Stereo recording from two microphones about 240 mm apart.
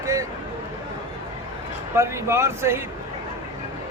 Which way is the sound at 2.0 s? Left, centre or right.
Centre.